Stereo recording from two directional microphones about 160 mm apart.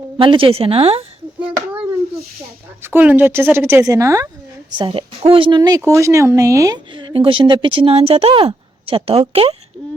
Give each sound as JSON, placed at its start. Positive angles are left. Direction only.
{"t": 0.2, "sound": "speech", "side_deg": -35}
{"t": 2.8, "sound": "speech", "side_deg": -10}
{"t": 4.8, "sound": "speech", "side_deg": -30}